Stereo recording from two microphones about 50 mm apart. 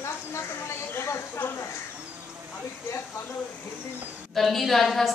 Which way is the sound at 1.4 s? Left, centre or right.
Left.